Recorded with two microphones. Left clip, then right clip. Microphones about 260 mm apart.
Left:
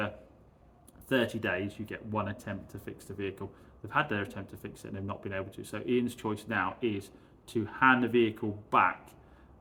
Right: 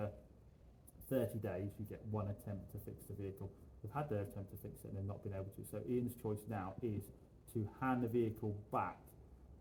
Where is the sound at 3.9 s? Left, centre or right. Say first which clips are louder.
Left 13 dB; centre.